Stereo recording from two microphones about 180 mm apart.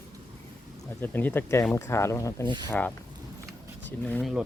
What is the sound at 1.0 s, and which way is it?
Speech, 10° left (ahead or behind).